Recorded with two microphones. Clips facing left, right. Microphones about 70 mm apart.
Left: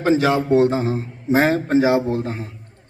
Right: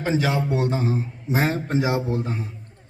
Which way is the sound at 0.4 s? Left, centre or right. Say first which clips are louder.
Left 7 dB; left.